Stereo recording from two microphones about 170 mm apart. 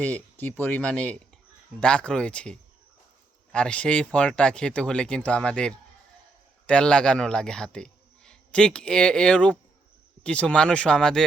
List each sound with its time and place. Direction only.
0.0 s speech: 10° left (ahead or behind)